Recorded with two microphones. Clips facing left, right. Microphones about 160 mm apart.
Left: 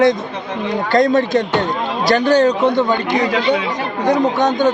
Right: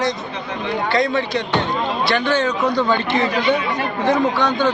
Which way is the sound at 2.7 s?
20° left (ahead or behind).